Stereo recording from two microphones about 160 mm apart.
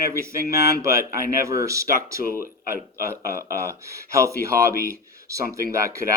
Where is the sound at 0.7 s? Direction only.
20° right (ahead or behind).